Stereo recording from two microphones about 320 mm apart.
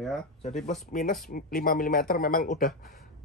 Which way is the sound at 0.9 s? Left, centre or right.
Left.